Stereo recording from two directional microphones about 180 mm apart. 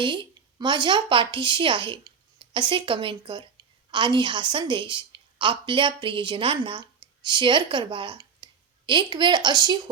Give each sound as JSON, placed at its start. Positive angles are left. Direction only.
{"t": 0.0, "sound": "a woman's voice", "side_deg": -25}